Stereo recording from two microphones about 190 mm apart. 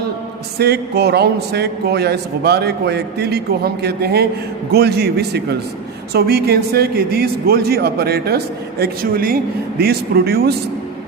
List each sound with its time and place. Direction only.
0.6 s a man's voice: 60° right (ahead or behind)